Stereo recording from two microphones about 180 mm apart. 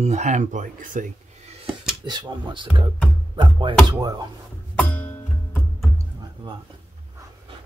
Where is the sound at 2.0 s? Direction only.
25° right (ahead or behind).